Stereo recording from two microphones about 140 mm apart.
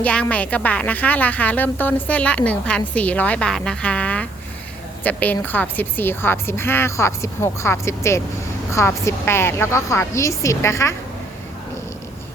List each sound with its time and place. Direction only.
0.0 s a woman's voice: 10° left (ahead or behind)